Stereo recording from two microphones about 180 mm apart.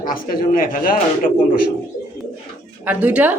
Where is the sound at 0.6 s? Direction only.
50° left (ahead or behind).